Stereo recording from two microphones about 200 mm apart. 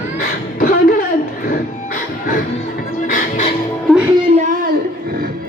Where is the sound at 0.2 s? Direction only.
45° left (ahead or behind).